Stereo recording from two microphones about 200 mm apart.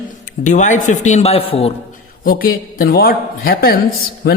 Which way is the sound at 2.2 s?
45° left (ahead or behind).